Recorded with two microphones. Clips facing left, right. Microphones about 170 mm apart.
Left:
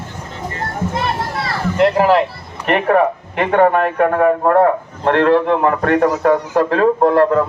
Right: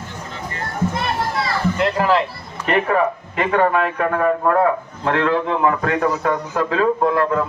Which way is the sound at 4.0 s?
35° left (ahead or behind).